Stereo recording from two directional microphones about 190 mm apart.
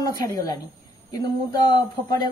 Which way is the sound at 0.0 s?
20° left (ahead or behind).